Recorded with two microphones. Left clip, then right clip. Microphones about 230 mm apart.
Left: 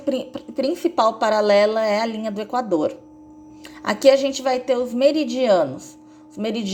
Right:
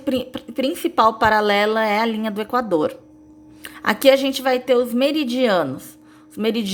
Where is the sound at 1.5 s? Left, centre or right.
Right.